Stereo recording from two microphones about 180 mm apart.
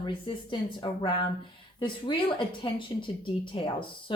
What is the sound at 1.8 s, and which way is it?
A woman's voice, 25° left (ahead or behind).